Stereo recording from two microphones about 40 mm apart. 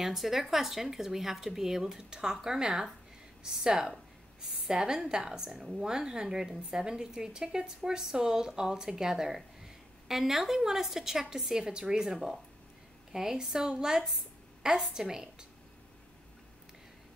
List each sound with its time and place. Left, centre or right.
0.0 s a woman's voice: centre